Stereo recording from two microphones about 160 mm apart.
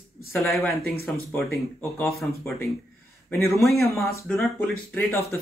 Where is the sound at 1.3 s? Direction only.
15° left (ahead or behind).